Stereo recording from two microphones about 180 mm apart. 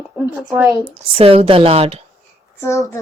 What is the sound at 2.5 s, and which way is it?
Speech, 15° left (ahead or behind).